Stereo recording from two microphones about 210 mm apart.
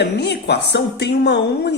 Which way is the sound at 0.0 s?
55° left (ahead or behind).